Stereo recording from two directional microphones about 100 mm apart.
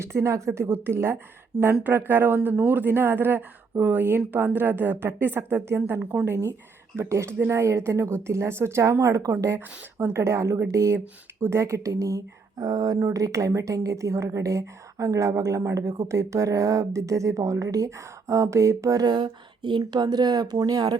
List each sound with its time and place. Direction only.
0.0 s a woman's voice: 30° right (ahead or behind)
6.9 s a woman's voice: 30° right (ahead or behind)
19.0 s speech: 50° right (ahead or behind)